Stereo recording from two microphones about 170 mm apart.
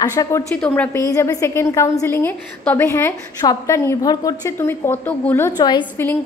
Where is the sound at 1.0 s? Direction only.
20° left (ahead or behind).